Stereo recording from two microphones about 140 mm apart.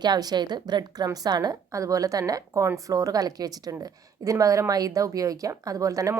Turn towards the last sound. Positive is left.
turn(degrees=-25)  # may be behind; listen again after turning